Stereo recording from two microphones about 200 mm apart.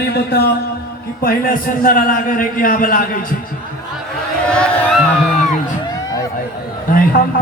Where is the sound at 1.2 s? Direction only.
45° left (ahead or behind).